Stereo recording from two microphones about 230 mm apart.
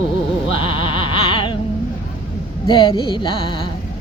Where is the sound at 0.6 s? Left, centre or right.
Left.